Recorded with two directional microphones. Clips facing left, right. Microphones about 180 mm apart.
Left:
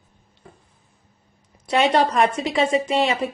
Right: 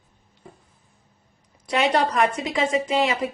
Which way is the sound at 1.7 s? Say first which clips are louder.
Left 3 dB; 30° left (ahead or behind).